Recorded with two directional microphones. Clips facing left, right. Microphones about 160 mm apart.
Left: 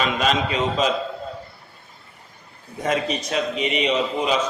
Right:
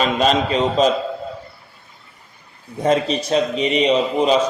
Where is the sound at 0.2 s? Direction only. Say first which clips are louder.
Right 5 dB; 35° right (ahead or behind).